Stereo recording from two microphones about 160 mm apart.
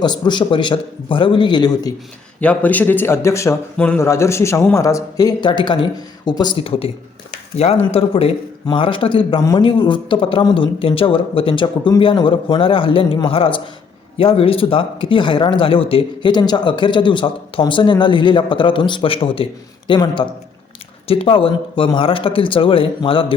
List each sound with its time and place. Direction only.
0.0 s a man's voice: 25° left (ahead or behind)
2.4 s a man's voice: 10° left (ahead or behind); by 23.2 s 35° left (ahead or behind)